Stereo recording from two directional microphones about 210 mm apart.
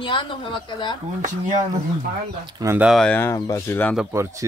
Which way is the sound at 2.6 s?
15° right (ahead or behind).